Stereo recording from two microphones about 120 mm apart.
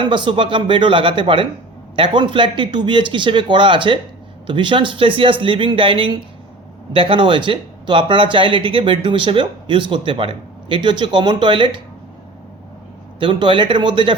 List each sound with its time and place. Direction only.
0.0 s speech: 45° right (ahead or behind)
13.1 s speech: 40° right (ahead or behind)